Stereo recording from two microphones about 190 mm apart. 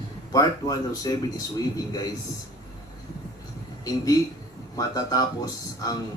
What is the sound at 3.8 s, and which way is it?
A man's voice, 20° left (ahead or behind).